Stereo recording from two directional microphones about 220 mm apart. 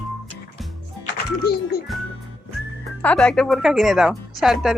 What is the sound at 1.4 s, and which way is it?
Speech, 45° left (ahead or behind).